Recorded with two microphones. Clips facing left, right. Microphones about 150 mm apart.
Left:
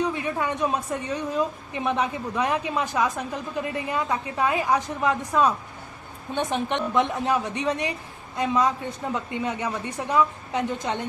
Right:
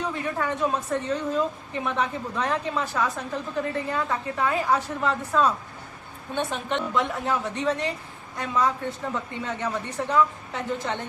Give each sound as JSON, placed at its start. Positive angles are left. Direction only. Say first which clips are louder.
{"t": 0.1, "sound": "a woman's voice", "louder": "left 1 dB", "side_deg": 15}